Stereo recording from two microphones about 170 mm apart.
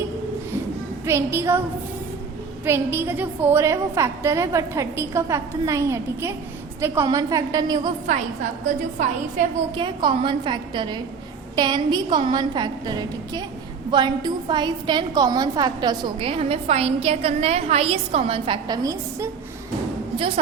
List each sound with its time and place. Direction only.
1.0 s a woman's voice: 15° right (ahead or behind)
2.6 s a woman's voice: 15° right (ahead or behind)
9.6 s a woman's voice: 30° right (ahead or behind)
20.1 s a woman's voice: 35° right (ahead or behind)